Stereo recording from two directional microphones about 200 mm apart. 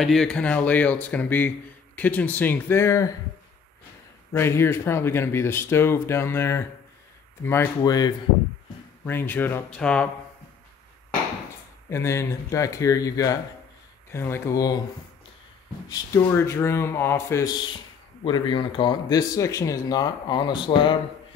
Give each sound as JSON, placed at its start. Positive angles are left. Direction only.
{"t": 0.0, "sound": "speech", "side_deg": 0}
{"t": 4.3, "sound": "speech", "side_deg": 10}
{"t": 11.9, "sound": "speech", "side_deg": 15}
{"t": 15.9, "sound": "speech", "side_deg": 15}